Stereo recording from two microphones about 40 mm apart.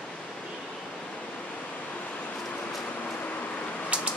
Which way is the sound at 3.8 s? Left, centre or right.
Right.